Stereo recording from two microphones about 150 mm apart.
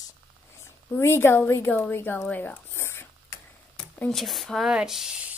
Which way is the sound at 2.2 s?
10° left (ahead or behind).